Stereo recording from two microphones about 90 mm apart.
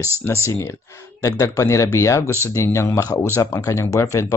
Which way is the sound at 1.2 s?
35° left (ahead or behind).